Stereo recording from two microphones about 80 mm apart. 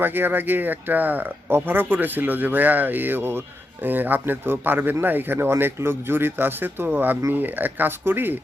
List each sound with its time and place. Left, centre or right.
0.0 s speech: right